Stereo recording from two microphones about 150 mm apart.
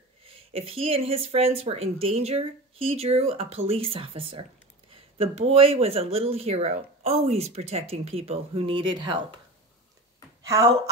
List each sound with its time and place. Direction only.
0.2 s speech: 40° right (ahead or behind)
10.4 s speech: 25° right (ahead or behind)